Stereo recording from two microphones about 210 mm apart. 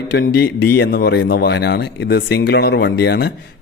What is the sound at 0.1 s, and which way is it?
Speech, 50° left (ahead or behind).